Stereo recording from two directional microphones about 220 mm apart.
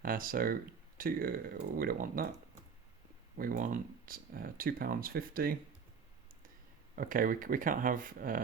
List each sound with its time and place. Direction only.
0.0 s speech: 40° right (ahead or behind)
3.3 s speech: 40° right (ahead or behind)
6.9 s speech: 40° right (ahead or behind)